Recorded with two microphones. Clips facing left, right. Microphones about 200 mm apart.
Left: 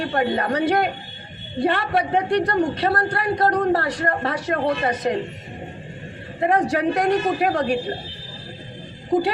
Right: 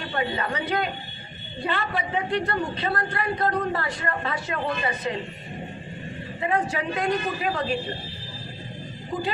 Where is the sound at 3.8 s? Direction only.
75° left (ahead or behind).